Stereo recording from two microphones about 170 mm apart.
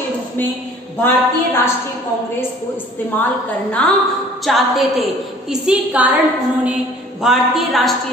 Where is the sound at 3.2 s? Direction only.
10° left (ahead or behind); by 6.1 s 5° right (ahead or behind).